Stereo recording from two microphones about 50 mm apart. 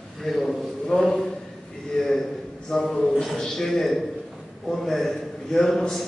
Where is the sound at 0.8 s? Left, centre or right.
Centre.